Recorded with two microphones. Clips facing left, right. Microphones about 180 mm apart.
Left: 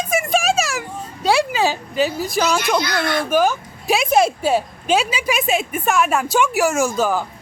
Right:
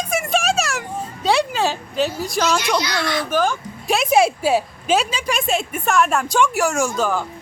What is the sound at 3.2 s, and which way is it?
A woman's voice, 10° left (ahead or behind).